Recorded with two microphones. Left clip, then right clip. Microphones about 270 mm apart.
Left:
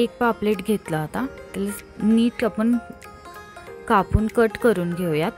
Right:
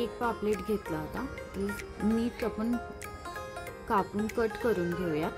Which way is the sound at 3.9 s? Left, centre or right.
Left.